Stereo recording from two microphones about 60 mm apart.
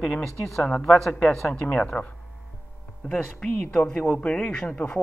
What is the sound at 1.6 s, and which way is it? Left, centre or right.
Speech, centre.